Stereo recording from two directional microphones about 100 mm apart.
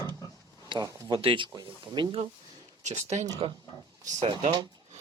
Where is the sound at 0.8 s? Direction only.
30° right (ahead or behind).